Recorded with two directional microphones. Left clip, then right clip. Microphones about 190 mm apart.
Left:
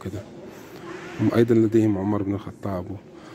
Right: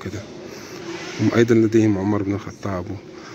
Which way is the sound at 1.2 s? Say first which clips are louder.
Right 3 dB; 10° left (ahead or behind).